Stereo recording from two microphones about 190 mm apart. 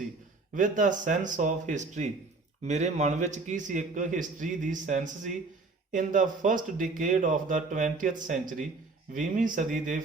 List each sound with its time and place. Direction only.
0.5 s a man's voice: 40° right (ahead or behind)